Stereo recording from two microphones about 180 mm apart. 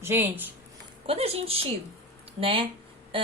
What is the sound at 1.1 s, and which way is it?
A woman's voice, 35° right (ahead or behind).